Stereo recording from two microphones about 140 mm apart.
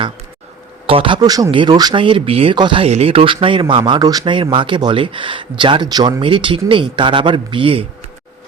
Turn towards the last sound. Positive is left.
turn(degrees=-40)  # may be behind; listen again after turning